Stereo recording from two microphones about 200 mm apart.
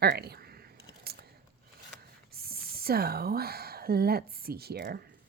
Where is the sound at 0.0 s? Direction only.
50° right (ahead or behind).